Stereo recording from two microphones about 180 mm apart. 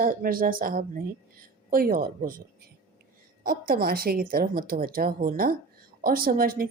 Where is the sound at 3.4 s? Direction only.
50° right (ahead or behind).